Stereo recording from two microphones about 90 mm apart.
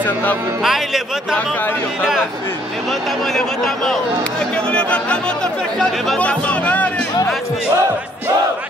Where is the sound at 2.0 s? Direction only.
5° right (ahead or behind).